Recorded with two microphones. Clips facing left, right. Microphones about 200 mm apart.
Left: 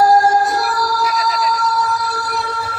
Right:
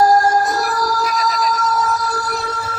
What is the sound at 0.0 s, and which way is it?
Music, 45° right (ahead or behind).